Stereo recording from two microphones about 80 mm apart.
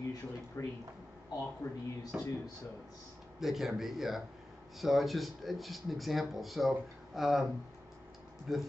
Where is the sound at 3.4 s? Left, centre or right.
Centre.